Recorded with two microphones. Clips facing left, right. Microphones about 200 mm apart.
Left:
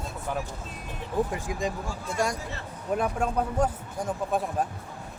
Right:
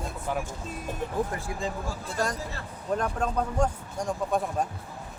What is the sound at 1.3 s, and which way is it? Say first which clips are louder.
Speech: left 2 dB; 15° left (ahead or behind).